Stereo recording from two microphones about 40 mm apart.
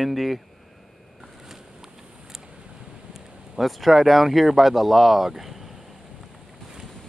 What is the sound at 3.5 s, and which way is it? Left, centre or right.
Speech, centre.